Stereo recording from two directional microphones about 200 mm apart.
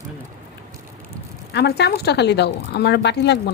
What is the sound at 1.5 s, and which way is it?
A woman's voice, 55° left (ahead or behind).